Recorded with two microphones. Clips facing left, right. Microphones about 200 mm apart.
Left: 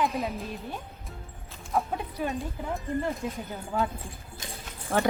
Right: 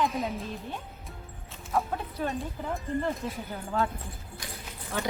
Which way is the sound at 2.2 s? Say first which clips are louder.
Even; centre (ahead or behind).